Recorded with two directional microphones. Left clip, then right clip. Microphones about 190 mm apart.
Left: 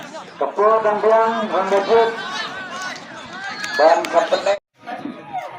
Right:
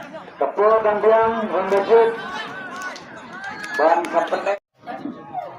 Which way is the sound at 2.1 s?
20° right (ahead or behind).